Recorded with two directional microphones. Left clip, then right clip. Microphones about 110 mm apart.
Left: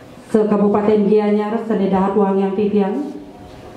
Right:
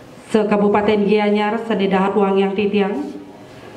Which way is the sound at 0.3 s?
30° right (ahead or behind).